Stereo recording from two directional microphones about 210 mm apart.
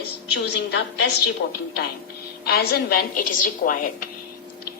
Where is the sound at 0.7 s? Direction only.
50° left (ahead or behind).